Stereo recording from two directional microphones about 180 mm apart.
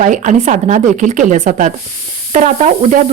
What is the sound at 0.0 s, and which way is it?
Speech, 45° right (ahead or behind).